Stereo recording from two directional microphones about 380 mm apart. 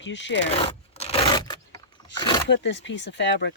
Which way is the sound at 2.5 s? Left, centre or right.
Left.